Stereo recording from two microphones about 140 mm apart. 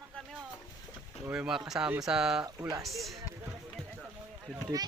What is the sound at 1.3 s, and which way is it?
Speech, 5° right (ahead or behind).